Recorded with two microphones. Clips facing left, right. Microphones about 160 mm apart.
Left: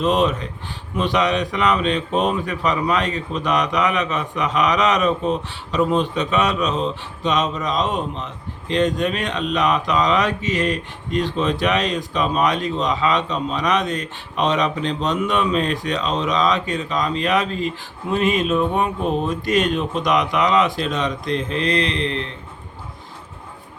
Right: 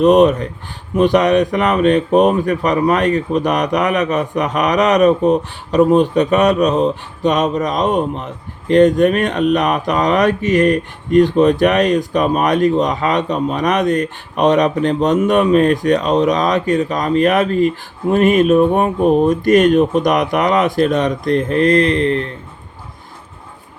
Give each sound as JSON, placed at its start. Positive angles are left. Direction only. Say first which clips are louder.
{"t": 0.0, "sound": "speech", "louder": "right 9 dB", "side_deg": -50}